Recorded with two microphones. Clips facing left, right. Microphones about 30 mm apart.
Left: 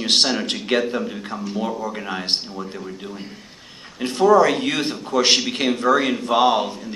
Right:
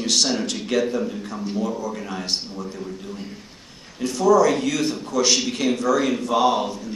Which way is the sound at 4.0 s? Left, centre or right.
Left.